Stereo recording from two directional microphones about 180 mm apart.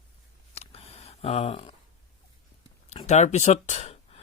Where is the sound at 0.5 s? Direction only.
35° left (ahead or behind).